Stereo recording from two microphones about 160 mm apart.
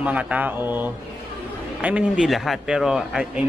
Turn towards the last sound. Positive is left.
turn(degrees=-5)  # may be behind; listen again after turning